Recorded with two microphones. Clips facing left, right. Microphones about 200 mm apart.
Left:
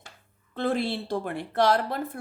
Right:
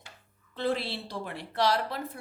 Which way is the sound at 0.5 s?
50° left (ahead or behind).